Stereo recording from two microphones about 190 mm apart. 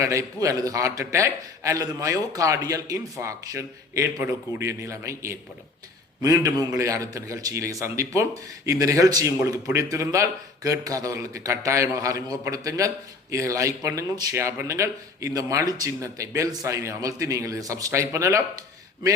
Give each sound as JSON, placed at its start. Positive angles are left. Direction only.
{"t": 0.0, "sound": "a man's voice", "side_deg": -15}